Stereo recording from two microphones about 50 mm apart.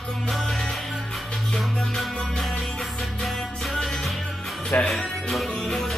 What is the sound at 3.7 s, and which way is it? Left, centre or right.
Music, centre.